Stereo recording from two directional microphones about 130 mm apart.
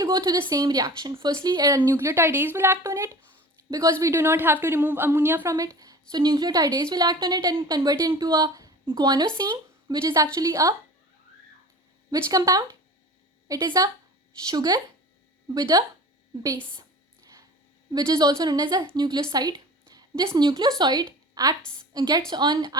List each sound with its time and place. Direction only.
0.0 s a woman's voice: 30° right (ahead or behind)
1.9 s a woman's voice: 20° right (ahead or behind)
12.1 s a woman's voice: 25° right (ahead or behind)
17.9 s a woman's voice: 30° right (ahead or behind)